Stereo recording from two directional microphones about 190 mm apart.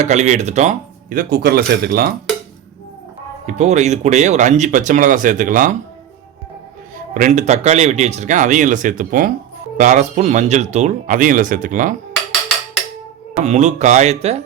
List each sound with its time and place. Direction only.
0.0 s speech: 35° right (ahead or behind)
3.4 s speech: 35° right (ahead or behind)
7.1 s speech: 40° right (ahead or behind)
13.4 s speech: 40° right (ahead or behind)